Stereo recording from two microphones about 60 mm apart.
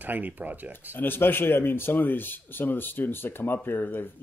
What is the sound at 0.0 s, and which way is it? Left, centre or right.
Speech, right.